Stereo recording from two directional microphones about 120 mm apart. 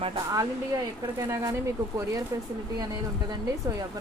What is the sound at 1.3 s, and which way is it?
Speech, 25° right (ahead or behind).